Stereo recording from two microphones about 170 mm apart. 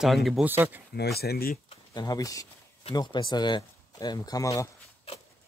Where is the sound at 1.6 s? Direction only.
25° left (ahead or behind).